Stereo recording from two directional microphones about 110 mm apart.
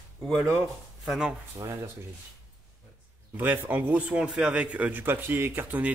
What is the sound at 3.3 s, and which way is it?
A man's voice, 15° right (ahead or behind).